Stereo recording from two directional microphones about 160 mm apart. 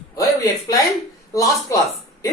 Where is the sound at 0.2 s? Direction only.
20° left (ahead or behind).